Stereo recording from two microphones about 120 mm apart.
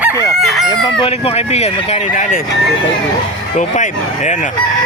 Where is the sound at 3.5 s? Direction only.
85° left.